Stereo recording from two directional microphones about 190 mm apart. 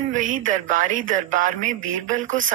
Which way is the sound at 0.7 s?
45° right (ahead or behind).